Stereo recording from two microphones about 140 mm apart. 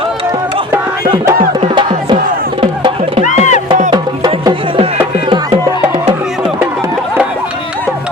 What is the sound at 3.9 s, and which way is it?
Music, 35° right (ahead or behind).